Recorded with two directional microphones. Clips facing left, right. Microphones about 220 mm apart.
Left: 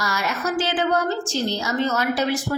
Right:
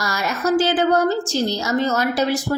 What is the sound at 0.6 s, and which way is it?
A woman's voice, 40° right (ahead or behind).